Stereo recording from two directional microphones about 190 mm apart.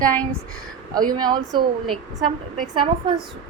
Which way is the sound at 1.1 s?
20° right (ahead or behind).